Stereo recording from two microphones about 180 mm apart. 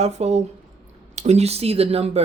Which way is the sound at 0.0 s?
35° right (ahead or behind).